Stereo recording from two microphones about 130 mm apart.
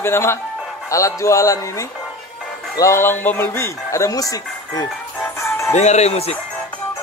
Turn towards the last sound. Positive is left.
turn(degrees=55)  # may be behind; listen again after turning